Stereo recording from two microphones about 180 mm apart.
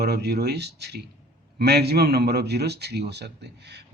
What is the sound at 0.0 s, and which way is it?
Speech, 65° right (ahead or behind).